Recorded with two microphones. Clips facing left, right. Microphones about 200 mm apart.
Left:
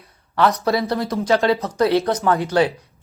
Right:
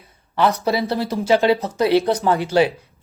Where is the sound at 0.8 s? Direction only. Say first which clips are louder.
Even; 30° right (ahead or behind).